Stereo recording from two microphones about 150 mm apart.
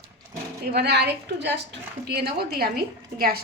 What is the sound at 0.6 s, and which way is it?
Speech, 90° right.